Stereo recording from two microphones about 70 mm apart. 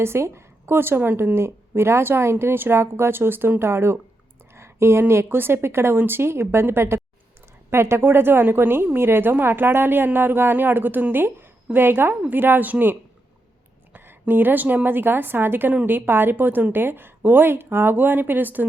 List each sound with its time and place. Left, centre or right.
0.0 s a woman's voice: right